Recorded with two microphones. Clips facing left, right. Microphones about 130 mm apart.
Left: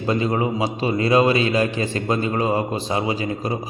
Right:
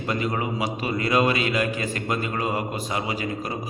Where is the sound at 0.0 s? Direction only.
25° left (ahead or behind).